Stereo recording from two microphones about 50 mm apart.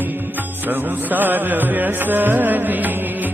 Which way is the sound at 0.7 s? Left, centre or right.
Right.